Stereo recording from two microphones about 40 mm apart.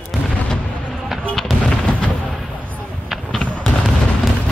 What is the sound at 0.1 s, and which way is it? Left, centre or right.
Artillery fire, centre.